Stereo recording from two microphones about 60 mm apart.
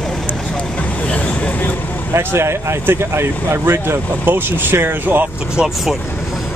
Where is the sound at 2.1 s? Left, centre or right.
Right.